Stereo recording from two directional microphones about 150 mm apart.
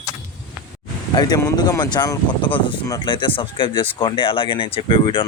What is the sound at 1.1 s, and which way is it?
Speech, 25° left (ahead or behind).